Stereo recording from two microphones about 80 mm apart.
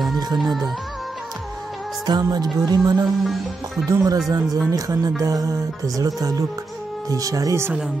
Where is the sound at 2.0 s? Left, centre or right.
Right.